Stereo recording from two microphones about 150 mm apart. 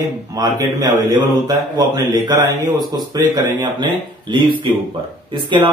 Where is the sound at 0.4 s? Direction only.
25° right (ahead or behind).